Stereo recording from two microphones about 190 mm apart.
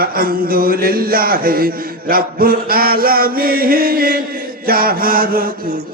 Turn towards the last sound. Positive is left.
turn(degrees=-50)  # may be behind; listen again after turning